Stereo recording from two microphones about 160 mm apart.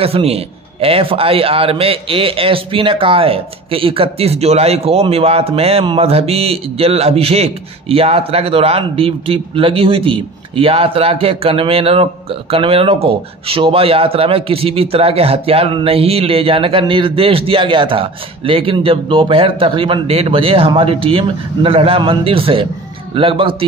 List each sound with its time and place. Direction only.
0.0 s a man's voice: 40° right (ahead or behind)